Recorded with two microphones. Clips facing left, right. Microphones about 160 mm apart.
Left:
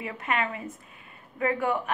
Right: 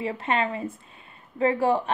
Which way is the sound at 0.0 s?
30° right (ahead or behind).